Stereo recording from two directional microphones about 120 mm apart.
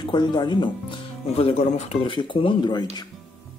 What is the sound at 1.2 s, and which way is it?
Speech, 60° left (ahead or behind).